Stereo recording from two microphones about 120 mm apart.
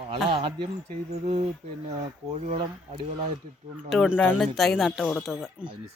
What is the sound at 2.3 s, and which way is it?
Speech, 60° right (ahead or behind).